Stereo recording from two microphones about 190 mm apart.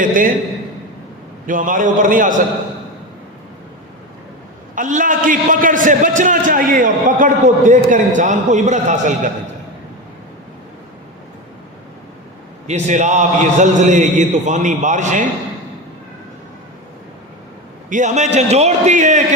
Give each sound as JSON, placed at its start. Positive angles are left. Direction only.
{"t": 0.0, "sound": "a man's voice", "side_deg": -45}
{"t": 1.5, "sound": "a man's voice", "side_deg": -45}
{"t": 4.7, "sound": "a man's voice", "side_deg": -45}
{"t": 12.6, "sound": "a man's voice", "side_deg": -40}
{"t": 17.8, "sound": "a man's voice", "side_deg": -40}